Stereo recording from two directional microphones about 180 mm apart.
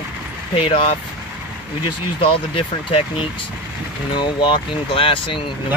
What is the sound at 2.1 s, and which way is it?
Speech, 30° left (ahead or behind).